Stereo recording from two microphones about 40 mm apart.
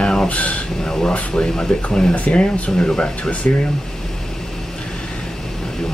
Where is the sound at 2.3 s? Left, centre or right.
Left.